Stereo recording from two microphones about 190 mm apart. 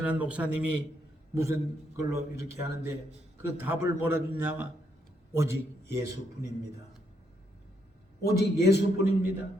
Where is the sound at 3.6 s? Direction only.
10° right (ahead or behind).